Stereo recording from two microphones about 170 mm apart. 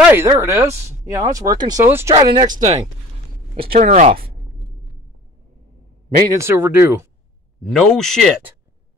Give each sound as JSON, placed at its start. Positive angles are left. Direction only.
{"t": 0.0, "sound": "speech", "side_deg": -15}
{"t": 2.2, "sound": "speech", "side_deg": -25}
{"t": 2.5, "sound": "speech", "side_deg": -45}
{"t": 3.6, "sound": "speech", "side_deg": -65}
{"t": 3.9, "sound": "speech", "side_deg": -40}
{"t": 6.3, "sound": "speech", "side_deg": -15}
{"t": 7.6, "sound": "speech", "side_deg": 0}